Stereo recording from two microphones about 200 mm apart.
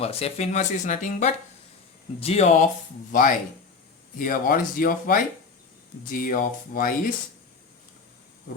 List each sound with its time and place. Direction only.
0.0 s speech: 30° left (ahead or behind)